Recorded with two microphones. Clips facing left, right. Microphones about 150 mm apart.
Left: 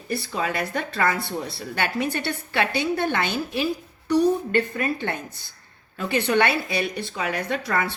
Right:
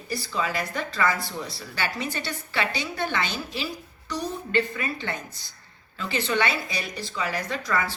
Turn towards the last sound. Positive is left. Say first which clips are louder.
# left 2 dB
turn(degrees=60)  # may be behind; listen again after turning